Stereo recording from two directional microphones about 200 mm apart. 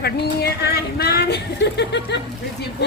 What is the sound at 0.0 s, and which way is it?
Speech, 55° left (ahead or behind).